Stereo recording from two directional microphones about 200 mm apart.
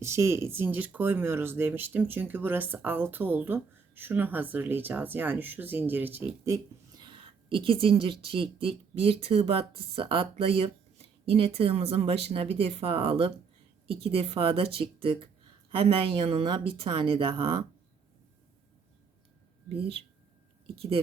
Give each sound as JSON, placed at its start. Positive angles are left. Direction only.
{"t": 0.0, "sound": "speech", "side_deg": -15}
{"t": 19.6, "sound": "speech", "side_deg": -30}